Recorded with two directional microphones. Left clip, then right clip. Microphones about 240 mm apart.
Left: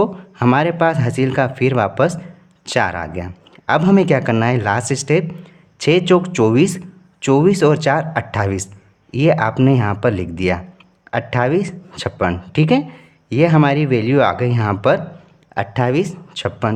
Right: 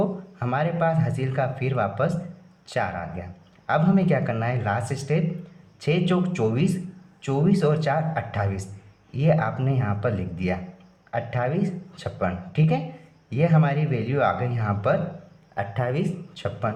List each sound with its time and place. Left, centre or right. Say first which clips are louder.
0.0 s speech: left 10 dB; left